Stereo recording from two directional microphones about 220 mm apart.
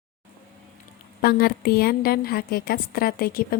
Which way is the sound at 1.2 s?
45° left (ahead or behind).